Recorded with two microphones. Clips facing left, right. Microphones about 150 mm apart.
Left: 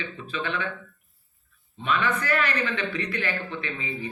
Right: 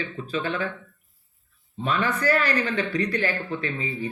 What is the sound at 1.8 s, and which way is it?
Speech, 35° right (ahead or behind).